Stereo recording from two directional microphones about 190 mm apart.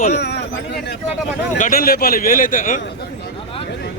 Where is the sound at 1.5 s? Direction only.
45° left (ahead or behind).